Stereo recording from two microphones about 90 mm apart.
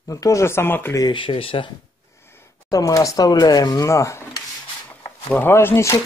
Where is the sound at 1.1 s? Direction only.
80° left.